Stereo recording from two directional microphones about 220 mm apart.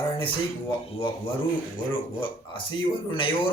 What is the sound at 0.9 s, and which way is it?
Speech, 25° left (ahead or behind).